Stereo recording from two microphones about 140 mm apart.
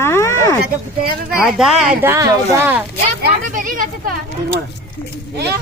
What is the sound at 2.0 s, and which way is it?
Speech, 20° right (ahead or behind).